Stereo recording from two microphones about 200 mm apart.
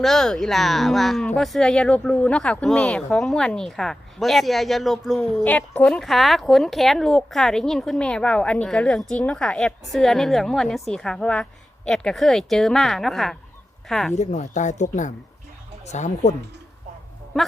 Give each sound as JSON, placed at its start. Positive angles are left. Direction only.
{"t": 0.0, "sound": "a woman's voice", "side_deg": 0}
{"t": 14.2, "sound": "speech", "side_deg": 35}